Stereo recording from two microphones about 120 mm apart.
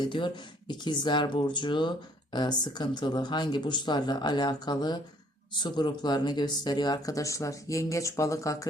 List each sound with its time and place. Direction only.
0.0 s speech: 40° left (ahead or behind); by 8.6 s 25° left (ahead or behind)